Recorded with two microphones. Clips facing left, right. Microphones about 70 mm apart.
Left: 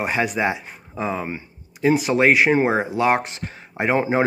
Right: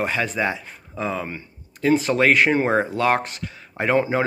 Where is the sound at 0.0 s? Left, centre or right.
Centre.